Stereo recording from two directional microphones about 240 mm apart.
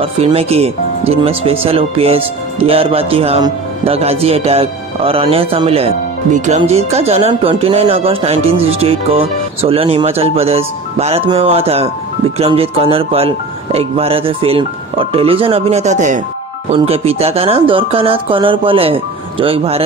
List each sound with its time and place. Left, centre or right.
0.0 s speech: right